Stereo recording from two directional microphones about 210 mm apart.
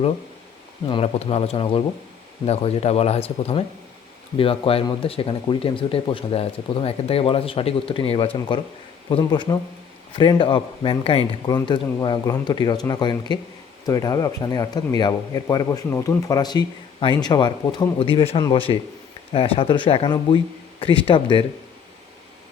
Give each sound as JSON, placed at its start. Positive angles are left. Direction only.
{"t": 0.9, "sound": "speech", "side_deg": 25}